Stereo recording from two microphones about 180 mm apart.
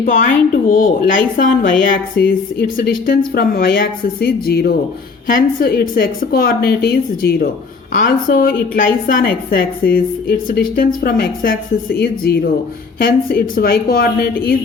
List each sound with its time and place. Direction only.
0.0 s a woman's voice: 50° left (ahead or behind)